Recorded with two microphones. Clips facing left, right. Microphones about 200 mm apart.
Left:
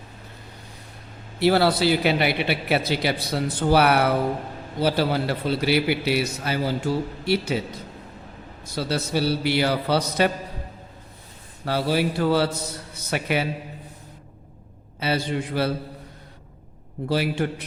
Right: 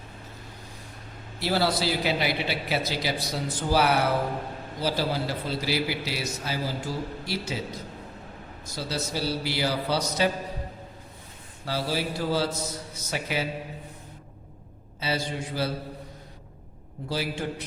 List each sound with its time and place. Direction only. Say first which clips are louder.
1.4 s a man's voice: left 7 dB; 60° left (ahead or behind)
8.7 s a man's voice: left 6 dB; 60° left (ahead or behind)
11.6 s a man's voice: left 6 dB; 60° left (ahead or behind)
15.0 s a man's voice: left 5 dB; 60° left (ahead or behind)
17.1 s a man's voice: left 6 dB; 60° left (ahead or behind)